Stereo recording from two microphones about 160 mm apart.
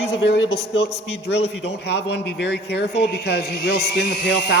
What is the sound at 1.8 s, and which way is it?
A man's voice, 90° left.